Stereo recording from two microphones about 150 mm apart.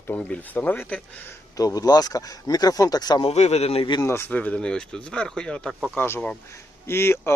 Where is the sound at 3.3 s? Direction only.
45° left (ahead or behind).